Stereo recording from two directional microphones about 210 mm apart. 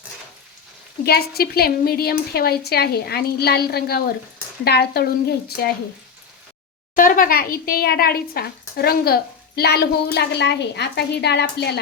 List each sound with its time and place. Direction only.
1.0 s speech: 50° left (ahead or behind)
6.9 s speech: 40° left (ahead or behind)